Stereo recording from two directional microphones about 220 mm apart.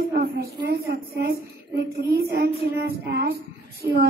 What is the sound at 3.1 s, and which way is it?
Speech, 50° right (ahead or behind).